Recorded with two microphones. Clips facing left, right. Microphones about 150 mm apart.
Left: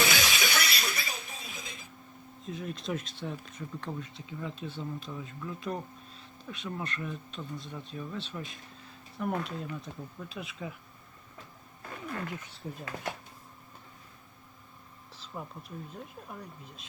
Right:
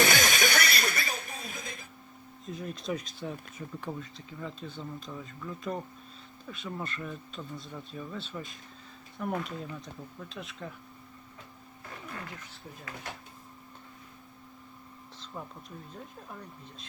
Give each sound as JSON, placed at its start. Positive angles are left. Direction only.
{"t": 0.0, "sound": "music", "side_deg": -50}
{"t": 2.4, "sound": "speech", "side_deg": 0}
{"t": 15.3, "sound": "speech", "side_deg": 5}